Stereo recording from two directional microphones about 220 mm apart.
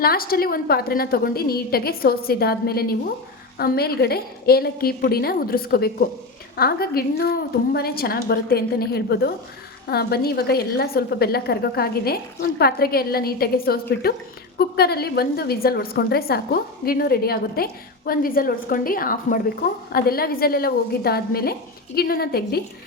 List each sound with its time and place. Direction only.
0.0 s a woman's voice: 45° left (ahead or behind)